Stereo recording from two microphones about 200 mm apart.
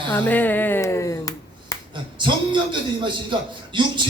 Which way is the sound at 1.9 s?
25° right (ahead or behind).